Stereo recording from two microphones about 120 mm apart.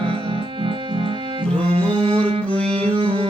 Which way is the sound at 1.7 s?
50° right (ahead or behind).